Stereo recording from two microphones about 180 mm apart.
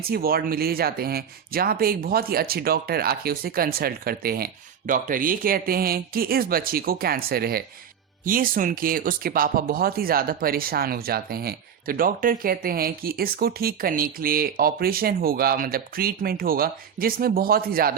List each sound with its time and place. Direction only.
0.0 s speech: 55° right (ahead or behind)